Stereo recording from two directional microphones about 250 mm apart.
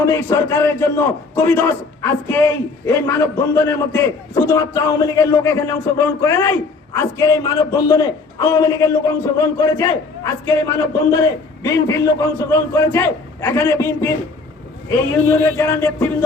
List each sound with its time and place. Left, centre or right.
0.0 s a man's voice: centre
15.3 s a man's voice: centre